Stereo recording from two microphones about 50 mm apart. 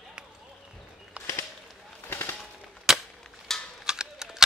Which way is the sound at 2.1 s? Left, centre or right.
Left.